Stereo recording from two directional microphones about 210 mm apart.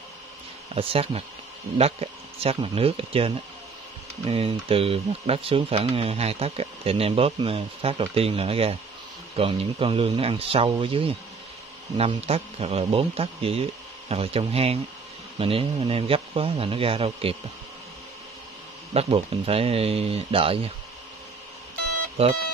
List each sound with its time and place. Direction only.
0.7 s speech: 30° right (ahead or behind)
18.9 s speech: 30° right (ahead or behind)
22.2 s speech: 30° right (ahead or behind)